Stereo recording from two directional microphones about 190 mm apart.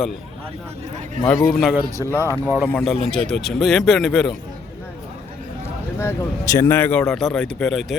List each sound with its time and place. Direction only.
1.2 s a man's voice: centre (ahead or behind)
5.6 s speech: 15° left (ahead or behind)